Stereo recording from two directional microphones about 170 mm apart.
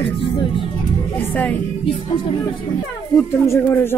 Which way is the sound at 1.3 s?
10° left (ahead or behind).